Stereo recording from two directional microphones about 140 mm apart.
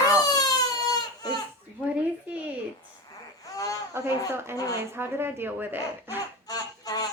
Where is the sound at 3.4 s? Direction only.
25° left (ahead or behind).